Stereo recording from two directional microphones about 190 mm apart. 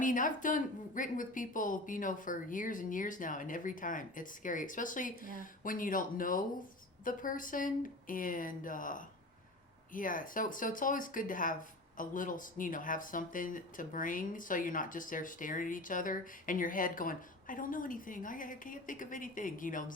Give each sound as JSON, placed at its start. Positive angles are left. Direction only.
{"t": 0.0, "sound": "speech", "side_deg": 45}